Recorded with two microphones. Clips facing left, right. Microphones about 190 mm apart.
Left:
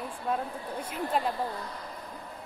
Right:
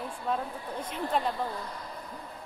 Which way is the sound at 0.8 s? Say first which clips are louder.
Even; 5° left (ahead or behind).